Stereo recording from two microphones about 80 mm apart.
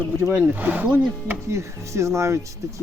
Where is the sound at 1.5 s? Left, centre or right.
Right.